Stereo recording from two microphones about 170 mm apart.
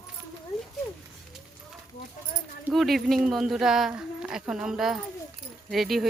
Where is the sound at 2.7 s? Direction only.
Centre (ahead or behind).